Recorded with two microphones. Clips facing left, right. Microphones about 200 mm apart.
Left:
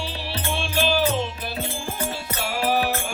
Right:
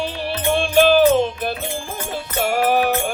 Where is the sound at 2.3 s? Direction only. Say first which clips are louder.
Right 6 dB; 50° right (ahead or behind).